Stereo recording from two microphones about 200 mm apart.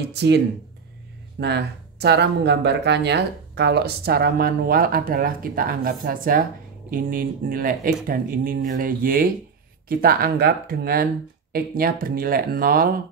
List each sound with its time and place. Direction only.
0.1 s speech: 60° right (ahead or behind)
1.4 s speech: 55° right (ahead or behind)